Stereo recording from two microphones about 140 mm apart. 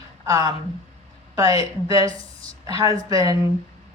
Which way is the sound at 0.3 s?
25° right (ahead or behind).